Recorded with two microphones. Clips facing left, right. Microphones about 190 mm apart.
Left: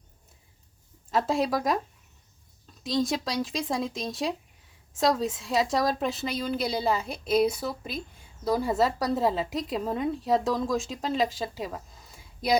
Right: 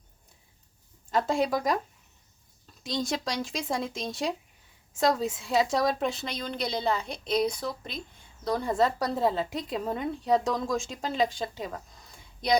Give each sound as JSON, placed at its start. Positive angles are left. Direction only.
{"t": 1.1, "sound": "speech", "side_deg": 0}
{"t": 2.8, "sound": "speech", "side_deg": 0}